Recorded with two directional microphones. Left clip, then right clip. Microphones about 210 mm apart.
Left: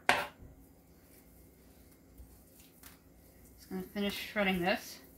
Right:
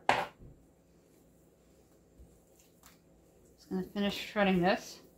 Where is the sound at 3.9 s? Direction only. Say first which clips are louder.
Right 2 dB; 30° right (ahead or behind).